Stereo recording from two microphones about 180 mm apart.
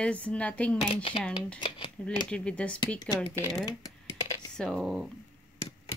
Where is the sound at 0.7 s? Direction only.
30° left (ahead or behind).